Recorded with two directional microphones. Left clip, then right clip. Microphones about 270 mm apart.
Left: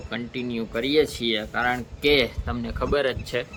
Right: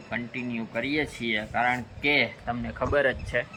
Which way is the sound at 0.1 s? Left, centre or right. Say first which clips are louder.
Left 2 dB; centre.